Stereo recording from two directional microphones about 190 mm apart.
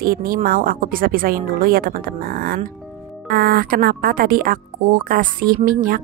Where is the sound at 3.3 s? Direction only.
50° right (ahead or behind).